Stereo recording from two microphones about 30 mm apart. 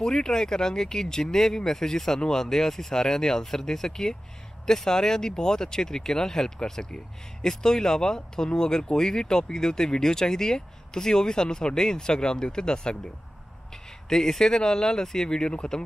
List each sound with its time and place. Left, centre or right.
0.0 s speech: left
14.0 s speech: left